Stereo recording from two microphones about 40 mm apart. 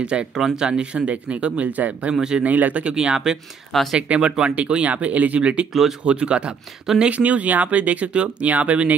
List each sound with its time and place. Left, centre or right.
0.0 s speech: right
0.3 s speech: centre
0.7 s speech: right
2.1 s speech: centre
2.4 s speech: right
2.8 s speech: right
3.7 s speech: centre
4.1 s speech: right
4.8 s speech: right
5.7 s speech: centre
6.0 s speech: right
7.1 s speech: right